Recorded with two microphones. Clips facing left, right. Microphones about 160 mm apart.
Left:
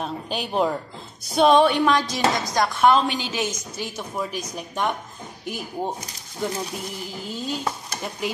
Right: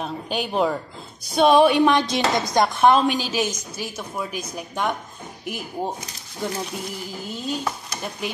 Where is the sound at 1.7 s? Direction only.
20° right (ahead or behind).